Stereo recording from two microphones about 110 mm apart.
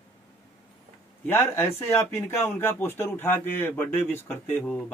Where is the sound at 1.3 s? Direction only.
20° left (ahead or behind).